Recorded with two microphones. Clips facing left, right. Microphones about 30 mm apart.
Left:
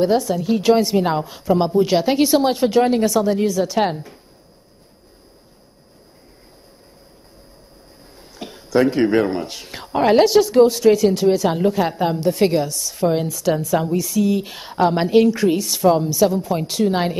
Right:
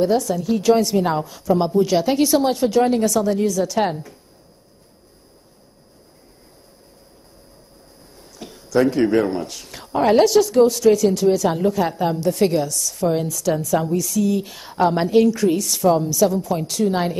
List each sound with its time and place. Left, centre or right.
0.0 s speech: left
8.0 s speech: left